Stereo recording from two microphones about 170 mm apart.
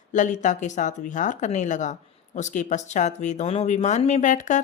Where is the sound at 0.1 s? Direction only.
45° left (ahead or behind).